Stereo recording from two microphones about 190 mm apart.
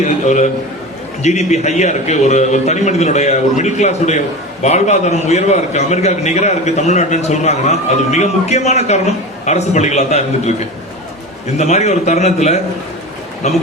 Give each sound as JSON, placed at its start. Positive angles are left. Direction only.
{"t": 0.0, "sound": "a man's voice", "side_deg": 40}